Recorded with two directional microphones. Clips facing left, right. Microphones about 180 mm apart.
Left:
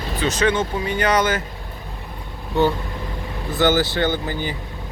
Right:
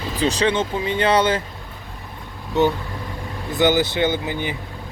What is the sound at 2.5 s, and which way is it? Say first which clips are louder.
Speech: even; 20° right (ahead or behind).